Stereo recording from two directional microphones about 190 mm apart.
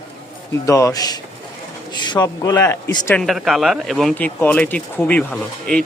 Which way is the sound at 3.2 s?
Centre (ahead or behind).